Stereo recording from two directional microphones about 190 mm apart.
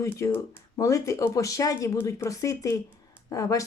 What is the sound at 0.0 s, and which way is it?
Speech, 15° left (ahead or behind).